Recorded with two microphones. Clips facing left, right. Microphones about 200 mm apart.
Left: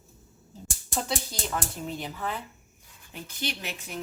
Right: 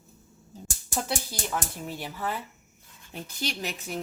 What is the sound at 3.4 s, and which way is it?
Speech, 40° right (ahead or behind).